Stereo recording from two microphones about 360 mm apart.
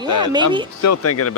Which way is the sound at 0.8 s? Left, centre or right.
Left.